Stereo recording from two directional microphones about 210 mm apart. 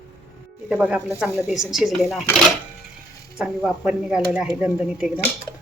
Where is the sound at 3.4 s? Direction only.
5° right (ahead or behind).